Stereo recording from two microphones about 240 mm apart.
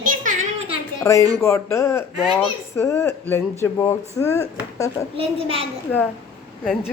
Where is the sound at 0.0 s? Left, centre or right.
Right.